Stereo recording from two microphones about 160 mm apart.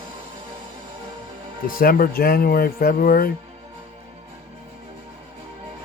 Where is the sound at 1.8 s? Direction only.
65° left (ahead or behind).